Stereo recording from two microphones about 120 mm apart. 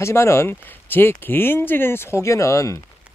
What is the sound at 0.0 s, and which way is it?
Speech, 25° left (ahead or behind).